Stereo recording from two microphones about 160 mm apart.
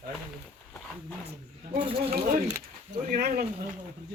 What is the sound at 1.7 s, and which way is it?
Speech, 35° right (ahead or behind).